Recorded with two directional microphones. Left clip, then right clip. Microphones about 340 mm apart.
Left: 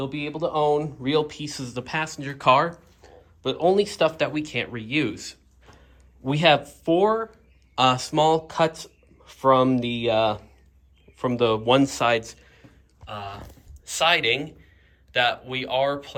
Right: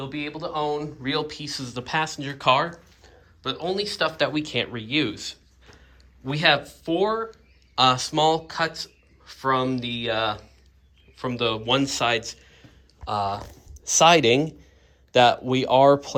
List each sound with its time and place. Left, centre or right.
0.0 s speech: centre
0.3 s speech: centre
13.1 s speech: centre